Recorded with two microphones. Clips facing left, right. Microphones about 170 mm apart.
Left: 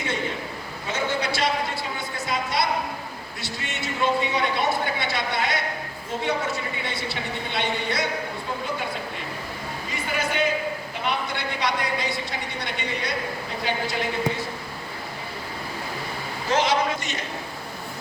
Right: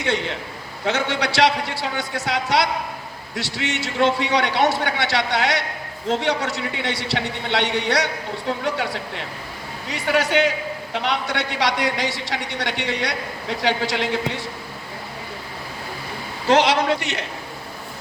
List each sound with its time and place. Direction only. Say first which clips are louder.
0.0 s a man's voice: right 4 dB; 75° right (ahead or behind)
16.5 s a man's voice: right 5 dB; 85° right; by 17.2 s 70° right (ahead or behind)